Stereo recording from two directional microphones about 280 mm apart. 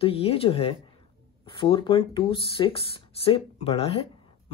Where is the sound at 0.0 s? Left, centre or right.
Left.